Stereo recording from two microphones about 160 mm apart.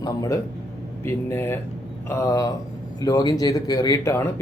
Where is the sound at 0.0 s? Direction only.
20° left (ahead or behind).